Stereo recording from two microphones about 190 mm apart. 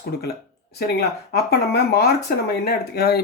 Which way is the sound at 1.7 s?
60° left (ahead or behind).